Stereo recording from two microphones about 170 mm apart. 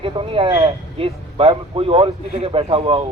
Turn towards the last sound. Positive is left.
turn(degrees=-35)  # may be behind; listen again after turning